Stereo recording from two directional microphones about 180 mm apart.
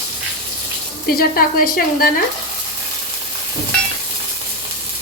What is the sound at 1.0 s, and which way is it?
Speech, 55° left (ahead or behind).